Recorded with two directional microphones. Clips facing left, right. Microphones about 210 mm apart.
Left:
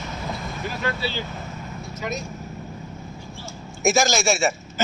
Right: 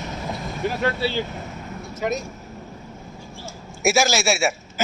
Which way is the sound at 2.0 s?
50° right (ahead or behind).